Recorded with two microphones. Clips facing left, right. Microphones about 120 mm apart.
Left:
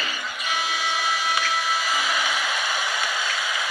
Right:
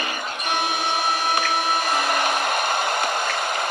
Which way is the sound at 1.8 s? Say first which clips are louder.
Right 4 dB; 60° right (ahead or behind).